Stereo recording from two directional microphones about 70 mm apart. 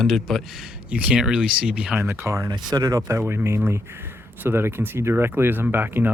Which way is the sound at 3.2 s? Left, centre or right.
Right.